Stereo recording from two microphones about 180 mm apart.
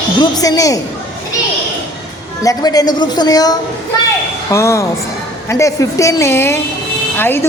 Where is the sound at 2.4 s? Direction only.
20° left (ahead or behind).